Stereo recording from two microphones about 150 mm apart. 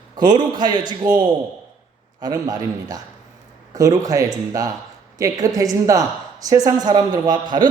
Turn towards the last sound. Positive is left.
turn(degrees=-30)  # may be behind; listen again after turning